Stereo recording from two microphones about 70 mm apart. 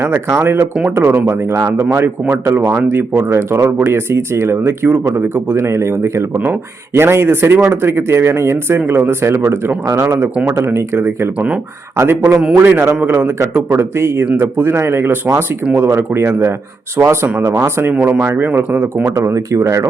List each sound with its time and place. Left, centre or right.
0.0 s speech: right
3.2 s speech: right
17.4 s speech: right